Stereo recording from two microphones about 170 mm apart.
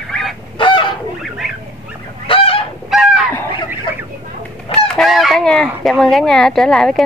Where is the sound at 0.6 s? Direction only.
30° left (ahead or behind).